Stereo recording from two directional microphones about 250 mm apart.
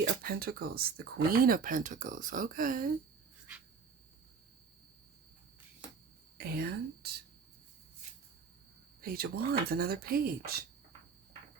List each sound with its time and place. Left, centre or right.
0.1 s speech: right
6.3 s speech: right
9.0 s speech: right